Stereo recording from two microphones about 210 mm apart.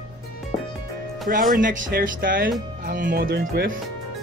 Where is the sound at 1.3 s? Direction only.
40° right (ahead or behind).